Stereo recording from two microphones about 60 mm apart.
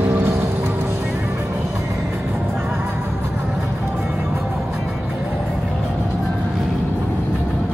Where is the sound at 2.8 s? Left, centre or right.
Right.